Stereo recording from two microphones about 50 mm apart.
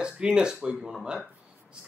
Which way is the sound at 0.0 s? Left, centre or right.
Centre.